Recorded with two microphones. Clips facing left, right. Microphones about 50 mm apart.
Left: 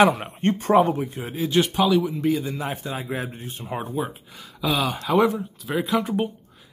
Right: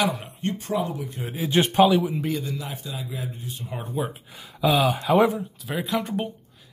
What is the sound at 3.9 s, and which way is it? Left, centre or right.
Speech, centre.